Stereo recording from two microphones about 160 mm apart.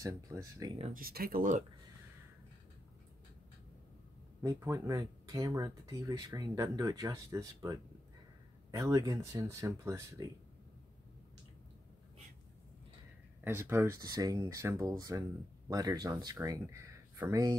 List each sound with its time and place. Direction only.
0.0 s speech: 20° right (ahead or behind)
0.9 s speech: 70° right (ahead or behind)
4.4 s speech: 15° right (ahead or behind)
13.4 s speech: 15° right (ahead or behind)